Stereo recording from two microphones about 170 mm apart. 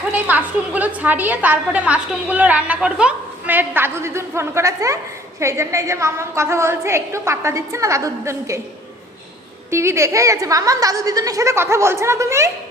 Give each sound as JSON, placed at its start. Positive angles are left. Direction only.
{"t": 0.1, "sound": "a woman's voice", "side_deg": -10}
{"t": 9.6, "sound": "a woman's voice", "side_deg": -15}